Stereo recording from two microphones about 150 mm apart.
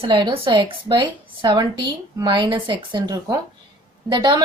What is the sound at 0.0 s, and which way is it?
A woman's voice, 35° right (ahead or behind).